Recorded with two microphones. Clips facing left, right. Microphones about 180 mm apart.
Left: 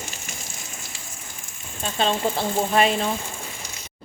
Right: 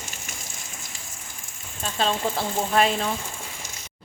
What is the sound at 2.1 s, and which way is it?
Speech, 25° left (ahead or behind).